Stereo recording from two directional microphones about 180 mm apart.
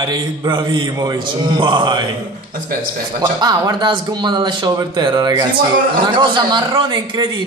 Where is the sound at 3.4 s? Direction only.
20° right (ahead or behind).